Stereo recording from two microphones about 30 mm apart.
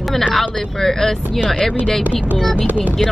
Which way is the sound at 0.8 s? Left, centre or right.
Centre.